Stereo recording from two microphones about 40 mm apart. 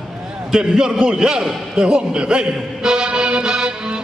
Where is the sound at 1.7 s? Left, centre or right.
Right.